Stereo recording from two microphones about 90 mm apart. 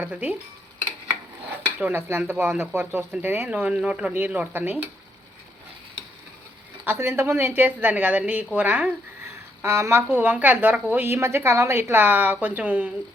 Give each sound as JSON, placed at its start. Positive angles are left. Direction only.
{"t": 0.0, "sound": "speech", "side_deg": -20}
{"t": 1.8, "sound": "a woman's voice", "side_deg": -25}
{"t": 6.8, "sound": "a woman's voice", "side_deg": -25}
{"t": 9.6, "sound": "a woman's voice", "side_deg": -30}